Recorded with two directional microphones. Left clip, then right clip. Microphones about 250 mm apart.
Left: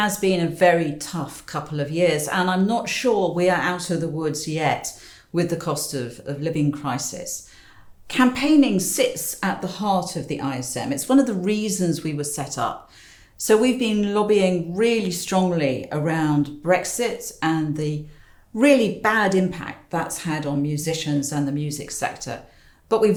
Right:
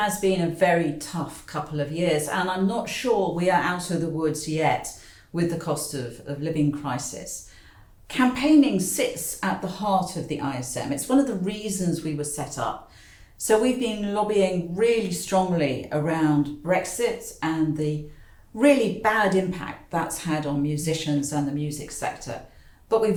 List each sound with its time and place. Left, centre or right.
0.0 s speech: left